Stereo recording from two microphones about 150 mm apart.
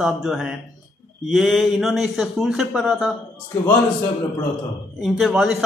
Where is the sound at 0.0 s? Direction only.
Centre (ahead or behind).